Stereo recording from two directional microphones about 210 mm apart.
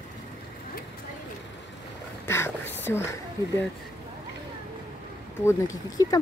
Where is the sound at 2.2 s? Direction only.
10° left (ahead or behind).